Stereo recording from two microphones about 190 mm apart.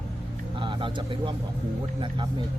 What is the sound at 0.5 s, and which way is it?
Speech, 25° right (ahead or behind).